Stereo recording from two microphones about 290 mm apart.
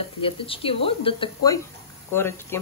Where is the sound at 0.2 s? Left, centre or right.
Centre.